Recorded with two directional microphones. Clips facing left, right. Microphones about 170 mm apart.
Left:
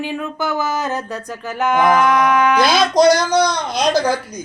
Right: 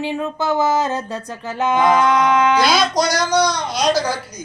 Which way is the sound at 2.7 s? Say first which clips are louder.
Left 5 dB; 50° left (ahead or behind).